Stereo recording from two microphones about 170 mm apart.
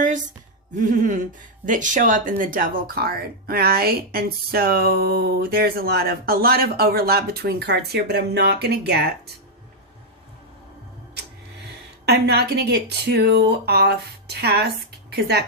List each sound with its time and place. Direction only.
0.8 s a sound: 50° right (ahead or behind)
1.6 s speech: 50° right (ahead or behind); by 9.0 s 75° right (ahead or behind)
12.0 s speech: 75° right (ahead or behind)